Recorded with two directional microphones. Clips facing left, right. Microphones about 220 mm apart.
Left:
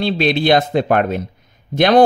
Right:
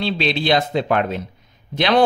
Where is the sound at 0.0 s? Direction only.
50° left (ahead or behind).